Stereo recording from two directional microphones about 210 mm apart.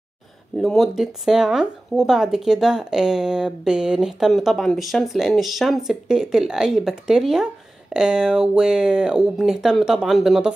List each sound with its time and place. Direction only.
0.6 s speech: centre (ahead or behind)